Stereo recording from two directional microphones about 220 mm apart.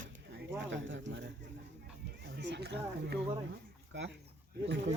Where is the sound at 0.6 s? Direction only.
55° right (ahead or behind).